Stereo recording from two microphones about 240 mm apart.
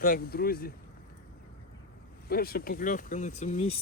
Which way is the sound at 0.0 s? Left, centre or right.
Left.